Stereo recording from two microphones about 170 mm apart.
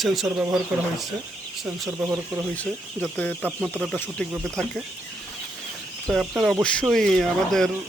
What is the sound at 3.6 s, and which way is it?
Speech, 5° right (ahead or behind).